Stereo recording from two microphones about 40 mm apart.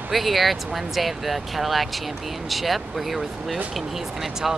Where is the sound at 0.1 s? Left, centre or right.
Centre.